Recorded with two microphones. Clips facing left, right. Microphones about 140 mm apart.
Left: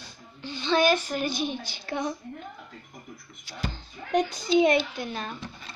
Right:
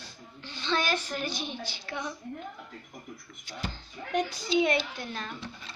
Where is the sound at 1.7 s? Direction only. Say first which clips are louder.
Left 6 dB; 40° left (ahead or behind).